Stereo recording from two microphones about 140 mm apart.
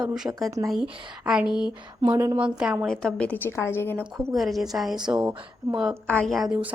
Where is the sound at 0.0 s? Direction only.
5° right (ahead or behind).